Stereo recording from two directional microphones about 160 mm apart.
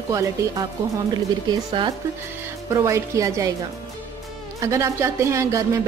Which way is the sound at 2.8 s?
20° right (ahead or behind).